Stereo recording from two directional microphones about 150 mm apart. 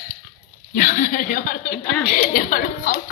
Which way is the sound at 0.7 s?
70° left (ahead or behind).